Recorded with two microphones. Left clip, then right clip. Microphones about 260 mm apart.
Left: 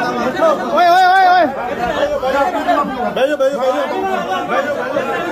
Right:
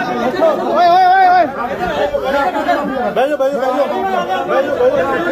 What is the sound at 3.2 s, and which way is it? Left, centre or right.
Speech, centre.